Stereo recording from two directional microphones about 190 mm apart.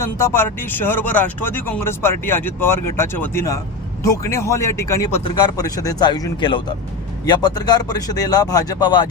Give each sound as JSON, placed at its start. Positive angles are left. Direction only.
{"t": 0.0, "sound": "speech", "side_deg": 15}